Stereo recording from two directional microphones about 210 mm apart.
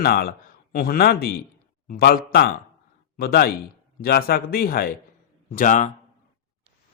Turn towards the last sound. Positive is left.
turn(degrees=35)  # may be behind; listen again after turning